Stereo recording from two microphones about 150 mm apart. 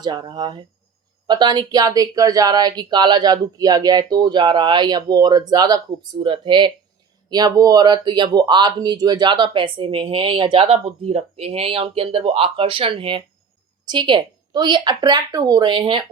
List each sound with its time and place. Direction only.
0.0 s speech: 30° right (ahead or behind)